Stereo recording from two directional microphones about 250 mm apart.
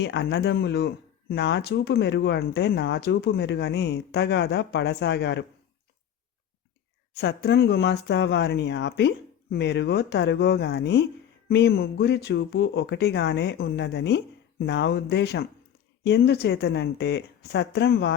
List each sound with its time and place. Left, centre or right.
0.0 s speech: left
7.2 s speech: left